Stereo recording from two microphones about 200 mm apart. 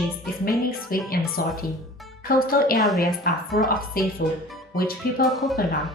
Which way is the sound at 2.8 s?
Centre (ahead or behind).